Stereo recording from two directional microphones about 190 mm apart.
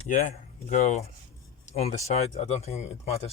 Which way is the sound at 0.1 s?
40° left (ahead or behind).